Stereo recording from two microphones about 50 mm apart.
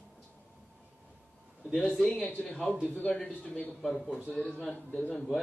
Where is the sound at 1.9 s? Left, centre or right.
Centre.